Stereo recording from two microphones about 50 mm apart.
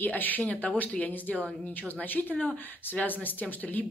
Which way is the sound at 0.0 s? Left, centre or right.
Left.